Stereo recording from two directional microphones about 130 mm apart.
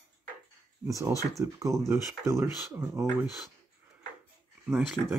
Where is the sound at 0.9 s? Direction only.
25° right (ahead or behind).